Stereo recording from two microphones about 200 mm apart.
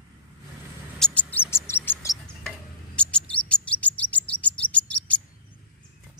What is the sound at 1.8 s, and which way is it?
Music, 15° left (ahead or behind).